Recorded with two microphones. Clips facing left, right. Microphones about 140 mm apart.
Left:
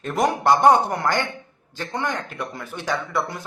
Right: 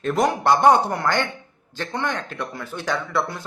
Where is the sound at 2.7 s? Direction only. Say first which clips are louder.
Right 3 dB; 20° left (ahead or behind).